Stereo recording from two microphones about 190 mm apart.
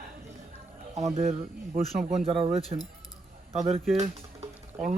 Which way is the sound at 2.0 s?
35° right (ahead or behind).